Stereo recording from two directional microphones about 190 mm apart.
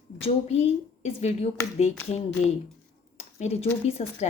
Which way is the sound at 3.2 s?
35° left (ahead or behind).